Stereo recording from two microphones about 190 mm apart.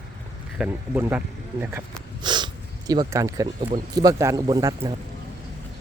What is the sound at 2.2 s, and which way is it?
Speech, 25° right (ahead or behind).